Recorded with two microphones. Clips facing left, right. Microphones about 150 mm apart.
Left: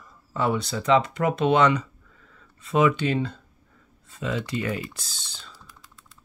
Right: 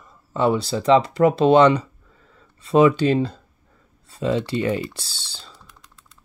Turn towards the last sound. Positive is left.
turn(degrees=-30)  # may be behind; listen again after turning